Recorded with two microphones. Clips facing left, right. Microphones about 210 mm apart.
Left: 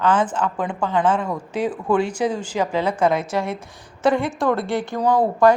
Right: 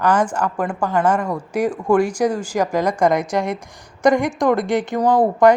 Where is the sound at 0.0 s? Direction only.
10° right (ahead or behind).